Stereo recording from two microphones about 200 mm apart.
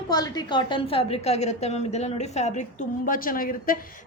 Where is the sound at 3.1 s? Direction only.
45° left (ahead or behind).